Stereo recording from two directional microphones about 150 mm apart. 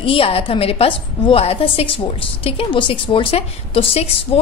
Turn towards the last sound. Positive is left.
turn(degrees=40)  # may be behind; listen again after turning